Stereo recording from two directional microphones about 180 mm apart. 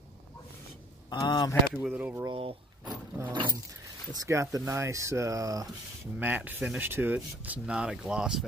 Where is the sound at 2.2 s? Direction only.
30° right (ahead or behind).